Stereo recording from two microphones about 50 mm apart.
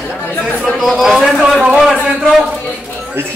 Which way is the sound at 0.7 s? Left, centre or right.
Centre.